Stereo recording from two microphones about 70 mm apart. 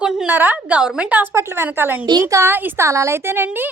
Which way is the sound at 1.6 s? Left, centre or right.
Right.